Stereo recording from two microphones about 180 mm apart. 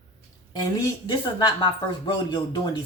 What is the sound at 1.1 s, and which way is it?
Speech, 25° left (ahead or behind).